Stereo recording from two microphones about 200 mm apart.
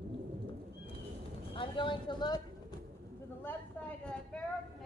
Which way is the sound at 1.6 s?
25° left (ahead or behind).